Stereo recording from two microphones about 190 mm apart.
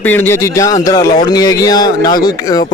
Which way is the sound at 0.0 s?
10° left (ahead or behind).